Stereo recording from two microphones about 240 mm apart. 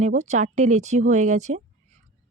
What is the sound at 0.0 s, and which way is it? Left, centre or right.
A woman's voice, right.